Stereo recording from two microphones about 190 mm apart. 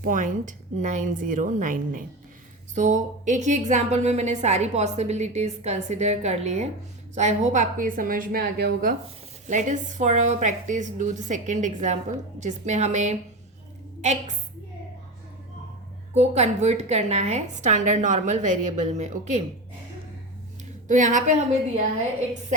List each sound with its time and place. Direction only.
0.0 s a woman's voice: 45° right (ahead or behind)
16.1 s a woman's voice: 35° right (ahead or behind)
20.8 s a woman's voice: 40° right (ahead or behind)